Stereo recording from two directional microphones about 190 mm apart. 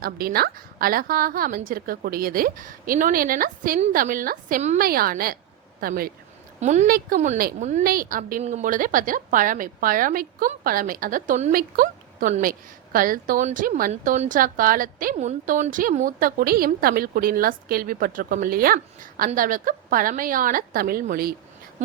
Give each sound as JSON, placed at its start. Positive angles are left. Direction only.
{"t": 0.0, "sound": "a woman's voice", "side_deg": -50}
{"t": 6.6, "sound": "a woman's voice", "side_deg": -40}
{"t": 11.5, "sound": "a woman's voice", "side_deg": -50}